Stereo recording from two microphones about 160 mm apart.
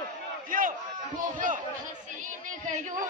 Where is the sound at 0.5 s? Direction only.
60° right (ahead or behind).